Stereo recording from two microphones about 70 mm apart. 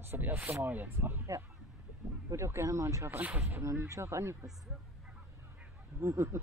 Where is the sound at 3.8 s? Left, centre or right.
Right.